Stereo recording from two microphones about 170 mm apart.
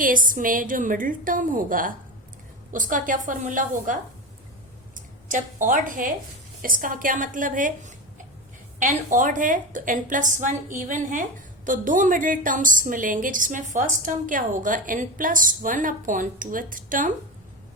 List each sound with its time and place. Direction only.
0.0 s a woman's voice: 50° right (ahead or behind)
4.9 s a woman's voice: 50° right (ahead or behind)